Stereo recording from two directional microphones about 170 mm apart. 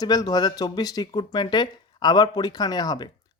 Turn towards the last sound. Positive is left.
turn(degrees=25)  # may be behind; listen again after turning